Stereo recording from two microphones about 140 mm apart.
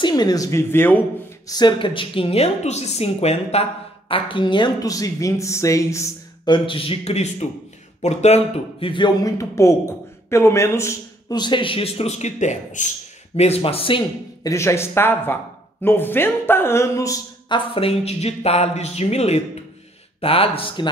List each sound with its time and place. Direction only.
0.0 s a woman's voice: 30° left (ahead or behind); by 1.0 s 15° left (ahead or behind)
1.5 s a woman's voice: 30° left (ahead or behind); by 3.6 s 50° left (ahead or behind)
4.1 s speech: 35° left (ahead or behind); by 12.8 s 55° left (ahead or behind)
13.4 s a woman's voice: 45° left (ahead or behind)
14.4 s a woman's voice: 20° left (ahead or behind)
17.7 s a woman's voice: 45° left (ahead or behind)